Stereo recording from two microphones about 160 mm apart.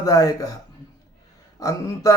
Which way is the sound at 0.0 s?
20° left (ahead or behind).